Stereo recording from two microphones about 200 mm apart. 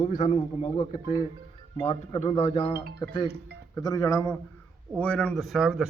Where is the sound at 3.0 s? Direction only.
15° left (ahead or behind).